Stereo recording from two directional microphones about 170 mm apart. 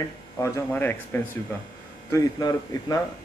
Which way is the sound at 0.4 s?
15° left (ahead or behind).